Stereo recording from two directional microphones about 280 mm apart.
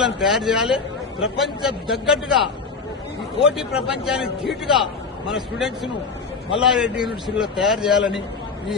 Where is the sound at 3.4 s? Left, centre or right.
Centre.